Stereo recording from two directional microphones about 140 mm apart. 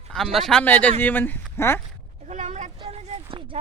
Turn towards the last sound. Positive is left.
turn(degrees=-40)  # may be behind; listen again after turning